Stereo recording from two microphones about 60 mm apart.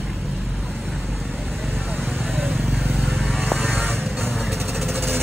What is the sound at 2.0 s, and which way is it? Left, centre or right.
Vehicle, centre.